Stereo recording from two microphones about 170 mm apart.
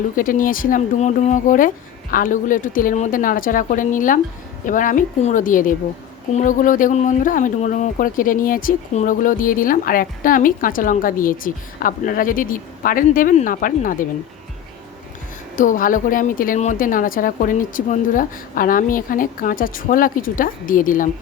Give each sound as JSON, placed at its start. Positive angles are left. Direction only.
{"t": 0.2, "sound": "speech", "side_deg": 55}
{"t": 15.5, "sound": "speech", "side_deg": 50}